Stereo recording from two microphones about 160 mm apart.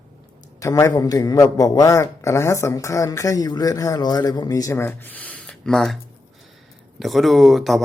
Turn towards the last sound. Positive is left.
turn(degrees=0)  # may be behind; listen again after turning